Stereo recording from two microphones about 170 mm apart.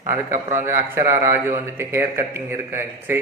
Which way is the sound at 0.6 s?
15° right (ahead or behind).